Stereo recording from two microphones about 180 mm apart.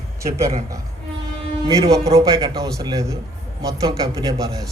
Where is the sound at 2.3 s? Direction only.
25° right (ahead or behind).